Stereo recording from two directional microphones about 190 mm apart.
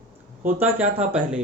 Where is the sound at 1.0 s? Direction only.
5° right (ahead or behind).